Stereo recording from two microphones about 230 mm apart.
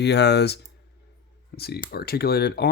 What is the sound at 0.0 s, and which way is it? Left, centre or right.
Speech, left.